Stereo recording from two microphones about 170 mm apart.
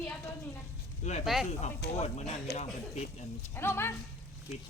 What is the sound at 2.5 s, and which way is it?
Speech, 70° left (ahead or behind).